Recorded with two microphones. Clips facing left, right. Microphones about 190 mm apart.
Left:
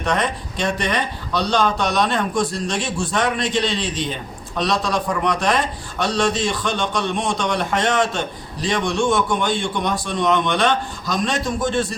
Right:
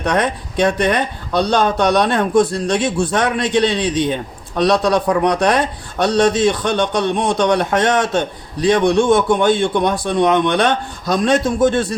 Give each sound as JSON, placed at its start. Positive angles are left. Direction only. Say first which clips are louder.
{"t": 0.5, "sound": "speech", "louder": "right 8 dB", "side_deg": -55}